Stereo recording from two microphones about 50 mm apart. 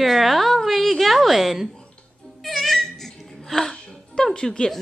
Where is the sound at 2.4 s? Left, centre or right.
Centre.